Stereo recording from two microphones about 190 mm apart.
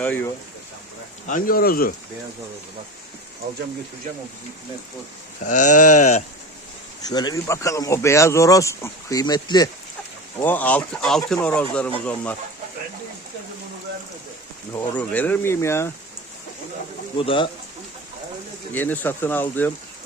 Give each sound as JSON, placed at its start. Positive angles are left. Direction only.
{"t": 0.0, "sound": "speech", "side_deg": 10}
{"t": 1.3, "sound": "speech", "side_deg": 50}
{"t": 5.5, "sound": "speech", "side_deg": 40}
{"t": 7.0, "sound": "speech", "side_deg": 20}
{"t": 10.4, "sound": "speech", "side_deg": 10}
{"t": 14.7, "sound": "speech", "side_deg": 10}
{"t": 17.2, "sound": "speech", "side_deg": 25}
{"t": 18.7, "sound": "speech", "side_deg": 10}